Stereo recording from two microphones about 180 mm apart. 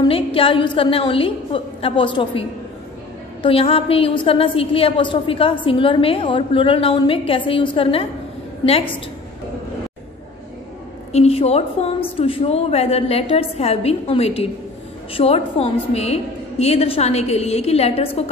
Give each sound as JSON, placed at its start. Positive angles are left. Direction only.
{"t": 0.0, "sound": "a woman's voice", "side_deg": 30}
{"t": 3.4, "sound": "a woman's voice", "side_deg": 30}
{"t": 11.1, "sound": "a woman's voice", "side_deg": 35}